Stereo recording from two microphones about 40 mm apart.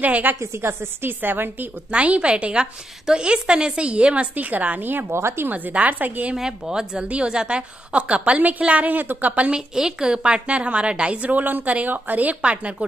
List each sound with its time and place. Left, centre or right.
0.0 s a woman's voice: right
0.6 s a woman's voice: right
1.9 s a woman's voice: right
5.5 s a woman's voice: right
6.3 s a woman's voice: centre
8.4 s a woman's voice: right
9.5 s a woman's voice: centre
11.2 s a woman's voice: right